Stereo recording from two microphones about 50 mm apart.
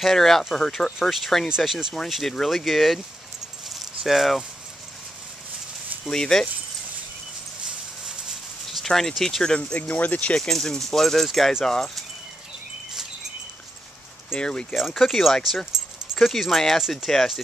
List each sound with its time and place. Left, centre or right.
0.0 s speech: centre
3.6 s keys jangling: centre
6.0 s speech: centre
8.6 s a sound: centre
9.2 s speech: centre
9.8 s speech: left
10.3 s speech: centre
14.3 s speech: centre
14.7 s speech: centre